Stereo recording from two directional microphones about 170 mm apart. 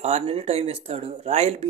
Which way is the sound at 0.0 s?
40° right (ahead or behind).